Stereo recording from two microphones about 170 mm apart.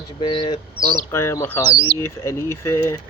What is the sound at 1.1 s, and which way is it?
Speech, 15° left (ahead or behind).